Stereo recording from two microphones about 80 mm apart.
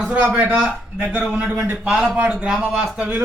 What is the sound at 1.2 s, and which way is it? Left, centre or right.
A man's voice, centre.